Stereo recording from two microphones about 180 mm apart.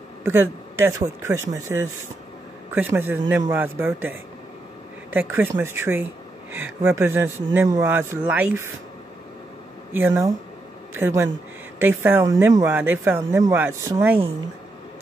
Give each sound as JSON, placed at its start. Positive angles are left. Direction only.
{"t": 0.2, "sound": "speech", "side_deg": -10}
{"t": 9.9, "sound": "speech", "side_deg": -15}